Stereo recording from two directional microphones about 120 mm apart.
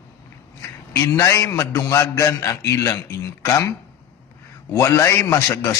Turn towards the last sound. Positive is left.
turn(degrees=25)  # may be behind; listen again after turning